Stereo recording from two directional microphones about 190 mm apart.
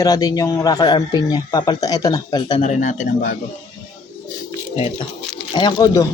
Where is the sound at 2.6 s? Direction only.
40° left (ahead or behind).